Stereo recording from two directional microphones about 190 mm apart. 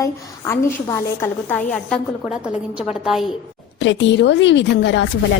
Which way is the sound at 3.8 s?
70° left (ahead or behind).